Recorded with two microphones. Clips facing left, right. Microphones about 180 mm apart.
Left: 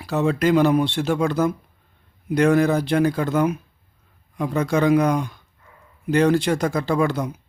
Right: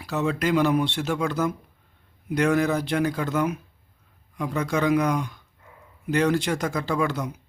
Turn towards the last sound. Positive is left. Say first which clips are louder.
# left 4 dB
turn(degrees=30)  # may be behind; listen again after turning